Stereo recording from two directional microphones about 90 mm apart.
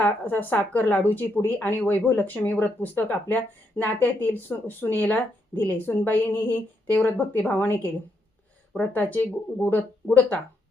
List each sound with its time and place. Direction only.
0.0 s speech: 20° left (ahead or behind)